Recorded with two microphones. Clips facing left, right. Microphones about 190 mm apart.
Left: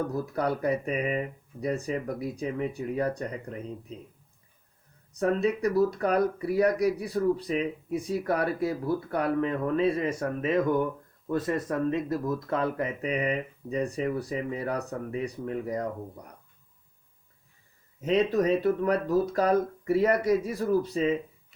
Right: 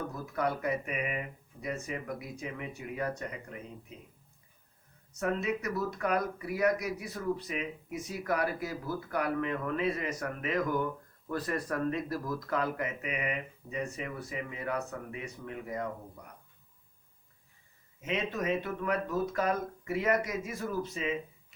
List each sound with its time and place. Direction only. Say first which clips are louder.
0.3 s speech: left 3 dB; 35° left (ahead or behind)
5.2 s speech: left 7 dB; 35° left (ahead or behind)
18.0 s speech: left 9 dB; 35° left (ahead or behind)